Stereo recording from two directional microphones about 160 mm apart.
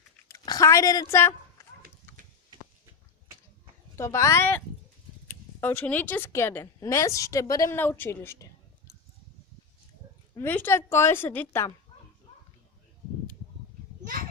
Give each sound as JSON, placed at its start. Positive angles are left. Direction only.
{"t": 0.3, "sound": "a sound", "side_deg": 25}
{"t": 3.9, "sound": "speech", "side_deg": 15}
{"t": 10.3, "sound": "speech", "side_deg": 15}
{"t": 14.0, "sound": "children playing", "side_deg": -60}